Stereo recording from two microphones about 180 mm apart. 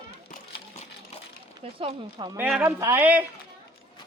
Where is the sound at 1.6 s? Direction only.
30° right (ahead or behind).